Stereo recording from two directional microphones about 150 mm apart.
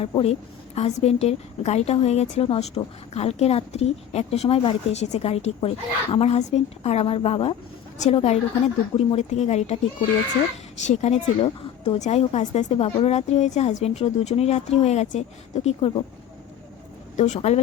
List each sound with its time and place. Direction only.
0.0 s a woman's voice: 40° left (ahead or behind)
7.9 s a woman's voice: 50° left (ahead or behind)
10.8 s a woman's voice: 50° left (ahead or behind)
17.2 s a woman's voice: 50° left (ahead or behind)